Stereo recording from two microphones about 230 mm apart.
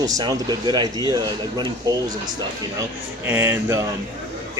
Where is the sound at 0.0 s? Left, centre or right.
Centre.